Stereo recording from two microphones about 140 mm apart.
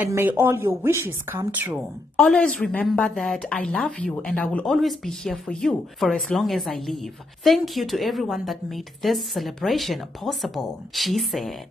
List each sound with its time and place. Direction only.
0.1 s a woman's voice: 15° right (ahead or behind)
2.1 s a woman's voice: 5° left (ahead or behind)